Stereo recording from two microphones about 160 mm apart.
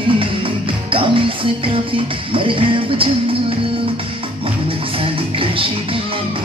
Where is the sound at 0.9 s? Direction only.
35° right (ahead or behind).